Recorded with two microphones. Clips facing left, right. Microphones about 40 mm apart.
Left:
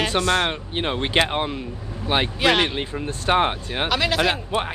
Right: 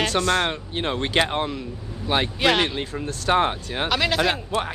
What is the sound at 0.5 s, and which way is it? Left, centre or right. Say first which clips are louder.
Speech: left 1 dB; centre.